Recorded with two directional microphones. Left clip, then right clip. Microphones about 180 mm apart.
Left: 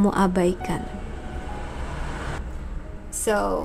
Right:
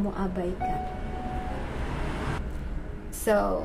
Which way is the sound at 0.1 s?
40° left (ahead or behind).